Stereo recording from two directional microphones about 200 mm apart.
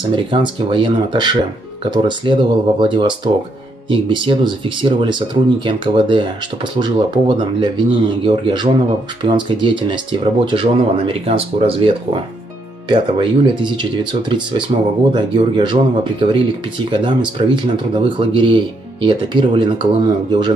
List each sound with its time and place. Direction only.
0.1 s speech: 25° right (ahead or behind)